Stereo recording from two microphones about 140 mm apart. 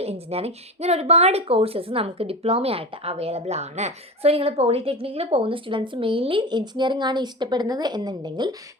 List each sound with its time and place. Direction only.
0.0 s speech: 45° right (ahead or behind); by 8.5 s 30° right (ahead or behind)